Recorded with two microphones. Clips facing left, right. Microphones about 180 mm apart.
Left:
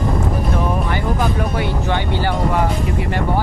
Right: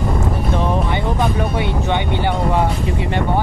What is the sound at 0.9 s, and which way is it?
Speech, 20° right (ahead or behind).